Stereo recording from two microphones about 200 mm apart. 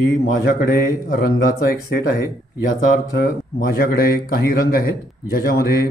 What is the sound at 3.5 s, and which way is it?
Speech, 50° left (ahead or behind).